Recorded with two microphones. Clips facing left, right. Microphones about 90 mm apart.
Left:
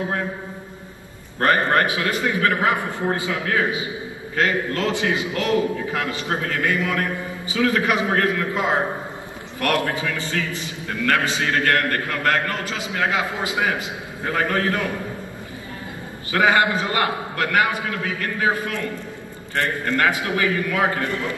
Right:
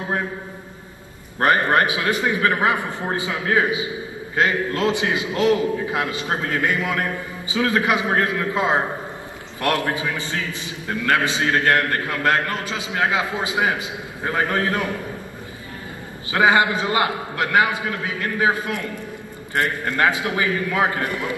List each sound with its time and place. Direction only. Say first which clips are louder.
1.4 s a man's voice: right 1 dB; 20° right (ahead or behind)
16.3 s a man's voice: right 1 dB; 20° right (ahead or behind)